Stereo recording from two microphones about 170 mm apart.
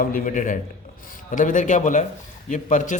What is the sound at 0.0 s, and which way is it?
A man's voice, 55° left (ahead or behind).